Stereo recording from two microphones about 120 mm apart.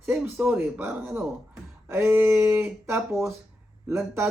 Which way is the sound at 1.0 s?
5° right (ahead or behind).